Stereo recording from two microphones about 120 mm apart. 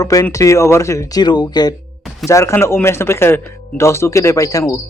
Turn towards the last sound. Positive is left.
turn(degrees=30)  # may be behind; listen again after turning